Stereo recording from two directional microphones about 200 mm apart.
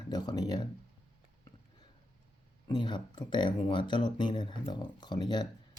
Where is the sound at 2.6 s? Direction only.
20° left (ahead or behind).